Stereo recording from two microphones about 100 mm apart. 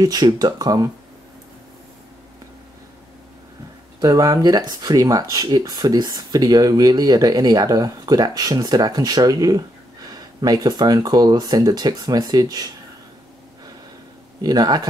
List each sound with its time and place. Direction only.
0.0 s speech: 40° right (ahead or behind)
4.0 s speech: 35° right (ahead or behind)
14.4 s speech: 40° right (ahead or behind)